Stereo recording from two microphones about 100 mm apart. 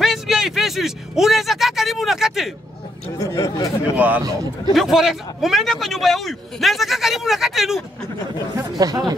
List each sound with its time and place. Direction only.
0.0 s speech: centre (ahead or behind)
3.2 s speech: 35° left (ahead or behind)
3.9 s a man's voice: 15° right (ahead or behind)
4.7 s a man's voice: centre (ahead or behind)
8.5 s speech: 40° right (ahead or behind)